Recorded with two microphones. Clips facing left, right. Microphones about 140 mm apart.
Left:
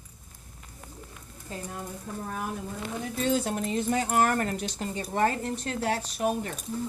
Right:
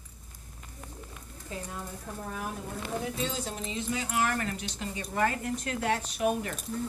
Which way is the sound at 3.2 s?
55° left (ahead or behind).